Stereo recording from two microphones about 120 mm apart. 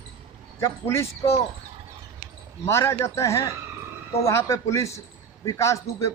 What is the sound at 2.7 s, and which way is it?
A man's voice, 25° left (ahead or behind).